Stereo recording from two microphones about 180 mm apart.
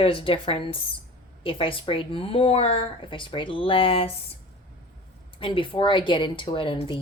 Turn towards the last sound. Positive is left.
turn(degrees=30)  # may be behind; listen again after turning